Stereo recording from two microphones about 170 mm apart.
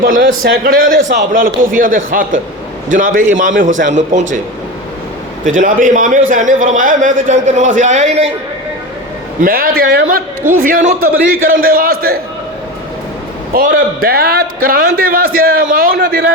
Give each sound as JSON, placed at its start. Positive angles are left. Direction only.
{"t": 0.0, "sound": "a man's voice", "side_deg": -55}
{"t": 5.5, "sound": "a man's voice", "side_deg": -50}
{"t": 9.4, "sound": "a man's voice", "side_deg": -60}
{"t": 13.5, "sound": "a man's voice", "side_deg": -55}